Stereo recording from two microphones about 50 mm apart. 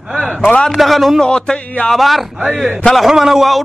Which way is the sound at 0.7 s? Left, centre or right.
Centre.